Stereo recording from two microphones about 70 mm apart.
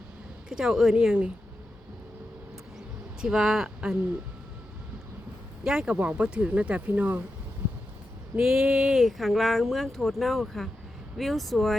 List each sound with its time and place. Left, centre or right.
0.4 s speech: centre
2.7 s bee: centre
5.6 s speech: centre
8.4 s speech: centre